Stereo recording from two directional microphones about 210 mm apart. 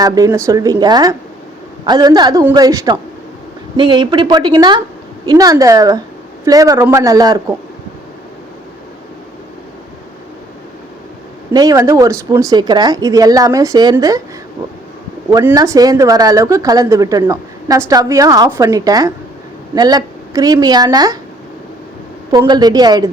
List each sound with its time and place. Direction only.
0.0 s a woman's voice: 15° right (ahead or behind)
11.5 s speech: 15° right (ahead or behind)
15.3 s a woman's voice: 15° right (ahead or behind)
22.3 s a woman's voice: 20° right (ahead or behind)